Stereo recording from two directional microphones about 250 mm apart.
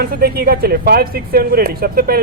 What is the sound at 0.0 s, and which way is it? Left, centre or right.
Speech, right.